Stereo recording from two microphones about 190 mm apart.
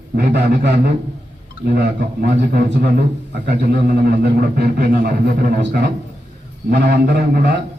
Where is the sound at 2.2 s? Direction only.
60° right (ahead or behind).